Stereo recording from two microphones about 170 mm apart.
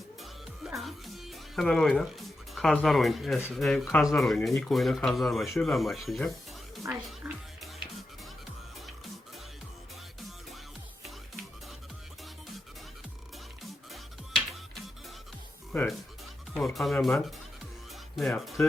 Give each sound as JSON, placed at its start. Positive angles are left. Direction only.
{"t": 0.2, "sound": "music", "side_deg": 0}
{"t": 3.5, "sound": "speech", "side_deg": 0}
{"t": 6.8, "sound": "speech", "side_deg": -15}
{"t": 13.6, "sound": "music", "side_deg": 0}
{"t": 15.7, "sound": "speech", "side_deg": 10}
{"t": 18.2, "sound": "speech", "side_deg": 0}